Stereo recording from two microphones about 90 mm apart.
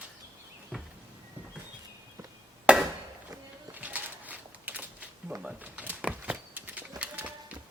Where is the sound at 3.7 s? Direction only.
15° right (ahead or behind).